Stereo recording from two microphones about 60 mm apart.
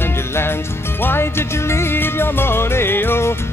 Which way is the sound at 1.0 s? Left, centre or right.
Left.